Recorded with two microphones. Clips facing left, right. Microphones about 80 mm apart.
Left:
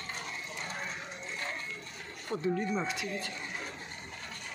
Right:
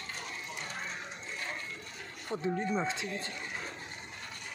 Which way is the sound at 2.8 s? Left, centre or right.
Right.